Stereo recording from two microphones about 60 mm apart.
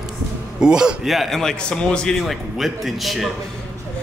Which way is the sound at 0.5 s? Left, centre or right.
Centre.